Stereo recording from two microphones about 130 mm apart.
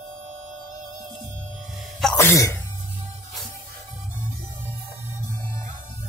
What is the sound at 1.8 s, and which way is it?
Music, centre (ahead or behind).